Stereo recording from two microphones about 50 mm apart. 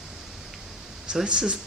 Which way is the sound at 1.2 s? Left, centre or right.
Centre.